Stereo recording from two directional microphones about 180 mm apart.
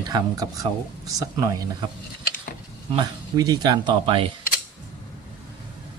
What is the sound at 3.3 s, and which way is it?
Speech, 20° right (ahead or behind).